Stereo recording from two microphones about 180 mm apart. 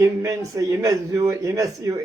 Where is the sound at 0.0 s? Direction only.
20° right (ahead or behind).